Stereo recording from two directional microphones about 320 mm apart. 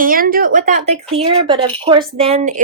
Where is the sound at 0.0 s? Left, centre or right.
Right.